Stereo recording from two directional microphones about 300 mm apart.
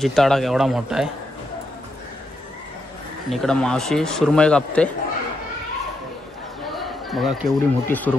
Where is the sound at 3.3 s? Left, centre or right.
Centre.